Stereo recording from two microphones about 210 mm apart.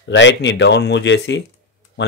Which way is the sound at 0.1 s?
60° left (ahead or behind).